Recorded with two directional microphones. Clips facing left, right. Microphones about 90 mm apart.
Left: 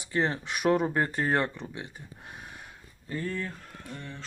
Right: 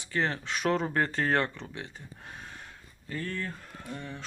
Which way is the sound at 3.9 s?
10° right (ahead or behind).